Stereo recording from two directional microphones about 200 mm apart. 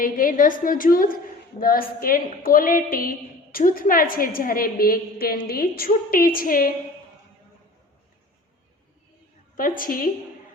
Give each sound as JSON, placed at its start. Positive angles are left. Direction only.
{"t": 0.0, "sound": "a woman's voice", "side_deg": 40}
{"t": 9.6, "sound": "a woman's voice", "side_deg": 45}